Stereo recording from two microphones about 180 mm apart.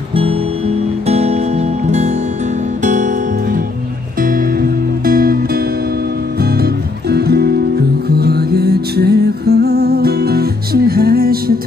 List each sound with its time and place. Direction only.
0.1 s music: 30° right (ahead or behind)
5.0 s music: 55° right (ahead or behind)
6.6 s music: 60° right (ahead or behind)